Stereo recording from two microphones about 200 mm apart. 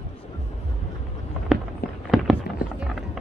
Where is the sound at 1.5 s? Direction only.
Centre (ahead or behind).